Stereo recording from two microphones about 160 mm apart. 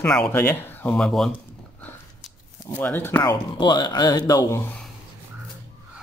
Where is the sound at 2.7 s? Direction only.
10° left (ahead or behind).